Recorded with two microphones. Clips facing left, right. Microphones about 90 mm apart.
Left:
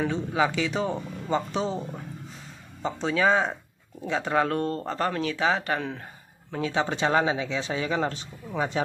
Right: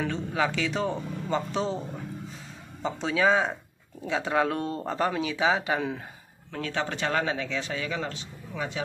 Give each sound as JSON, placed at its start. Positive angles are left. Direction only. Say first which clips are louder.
{"t": 0.0, "sound": "speech", "louder": "left 3 dB", "side_deg": 5}
{"t": 6.5, "sound": "speech", "louder": "left 4 dB", "side_deg": 15}